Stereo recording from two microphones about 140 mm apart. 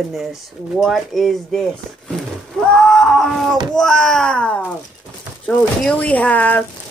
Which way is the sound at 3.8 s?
5° left (ahead or behind).